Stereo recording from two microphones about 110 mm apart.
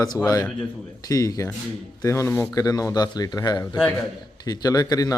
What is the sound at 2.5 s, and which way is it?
Speech, 30° left (ahead or behind).